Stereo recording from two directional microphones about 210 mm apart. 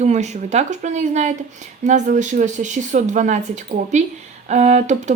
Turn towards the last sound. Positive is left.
turn(degrees=-30)  # may be behind; listen again after turning